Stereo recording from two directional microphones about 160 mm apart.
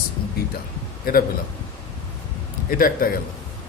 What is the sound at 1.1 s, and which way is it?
Speech, 65° left (ahead or behind).